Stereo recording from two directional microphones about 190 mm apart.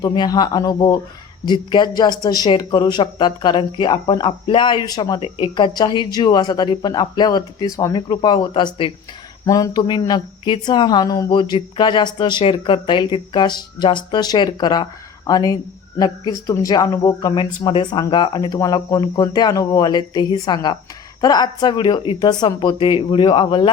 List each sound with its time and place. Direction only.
0.0 s speech: 20° left (ahead or behind)